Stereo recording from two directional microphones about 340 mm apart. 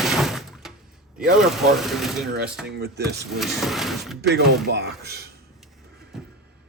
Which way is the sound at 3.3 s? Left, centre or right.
Centre.